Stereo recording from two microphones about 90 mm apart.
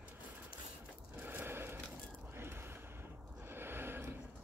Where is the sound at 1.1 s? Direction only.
25° right (ahead or behind).